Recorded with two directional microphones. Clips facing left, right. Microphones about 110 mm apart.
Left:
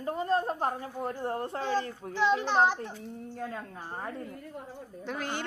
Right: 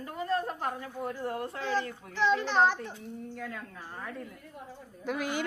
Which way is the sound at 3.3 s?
30° left (ahead or behind).